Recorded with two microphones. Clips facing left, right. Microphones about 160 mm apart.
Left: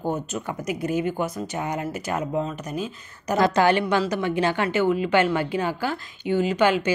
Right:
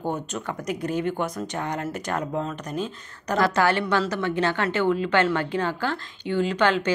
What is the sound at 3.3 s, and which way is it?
Speech, 20° left (ahead or behind).